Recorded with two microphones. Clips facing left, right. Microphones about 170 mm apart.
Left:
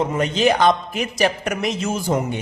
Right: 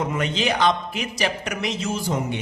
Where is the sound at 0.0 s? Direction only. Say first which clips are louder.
Left 5 dB; 40° left (ahead or behind).